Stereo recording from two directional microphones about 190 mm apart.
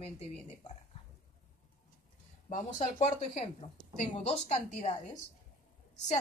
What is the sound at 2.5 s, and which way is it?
Speech, 40° left (ahead or behind).